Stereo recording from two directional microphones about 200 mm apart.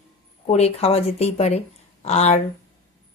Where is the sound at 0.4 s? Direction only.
30° left (ahead or behind).